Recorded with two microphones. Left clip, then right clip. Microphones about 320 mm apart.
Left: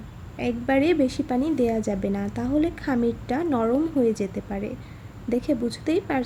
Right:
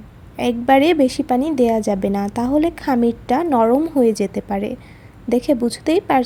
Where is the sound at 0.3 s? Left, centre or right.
Right.